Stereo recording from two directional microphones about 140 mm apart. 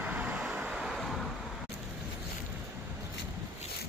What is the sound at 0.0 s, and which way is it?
Vehicle, 10° right (ahead or behind).